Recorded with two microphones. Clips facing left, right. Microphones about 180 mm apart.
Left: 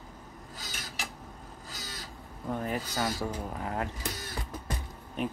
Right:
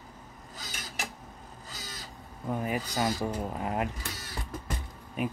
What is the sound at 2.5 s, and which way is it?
Speech, 10° right (ahead or behind).